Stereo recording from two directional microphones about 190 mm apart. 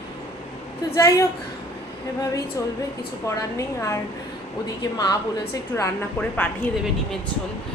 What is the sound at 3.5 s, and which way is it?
Speech, 15° left (ahead or behind).